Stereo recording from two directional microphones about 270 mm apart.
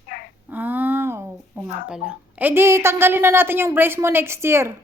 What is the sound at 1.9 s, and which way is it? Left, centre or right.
A woman's voice, centre.